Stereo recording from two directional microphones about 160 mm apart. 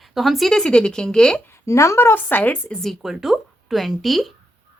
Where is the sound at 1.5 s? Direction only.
20° left (ahead or behind).